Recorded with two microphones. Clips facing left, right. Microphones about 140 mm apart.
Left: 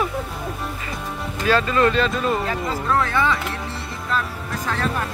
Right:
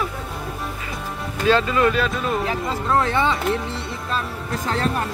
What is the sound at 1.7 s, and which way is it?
Speech, 5° right (ahead or behind).